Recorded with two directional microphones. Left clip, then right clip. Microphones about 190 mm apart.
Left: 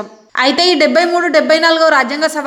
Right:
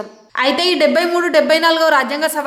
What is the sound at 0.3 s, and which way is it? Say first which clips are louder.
A woman's voice: left 3 dB; 15° left (ahead or behind).